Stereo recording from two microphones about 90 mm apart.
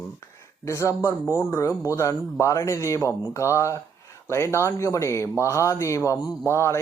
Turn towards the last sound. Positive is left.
turn(degrees=30)  # may be behind; listen again after turning